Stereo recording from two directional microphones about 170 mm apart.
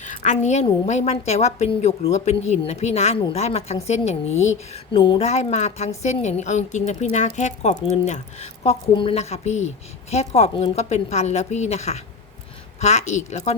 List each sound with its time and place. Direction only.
0.0 s a woman's voice: 45° left (ahead or behind)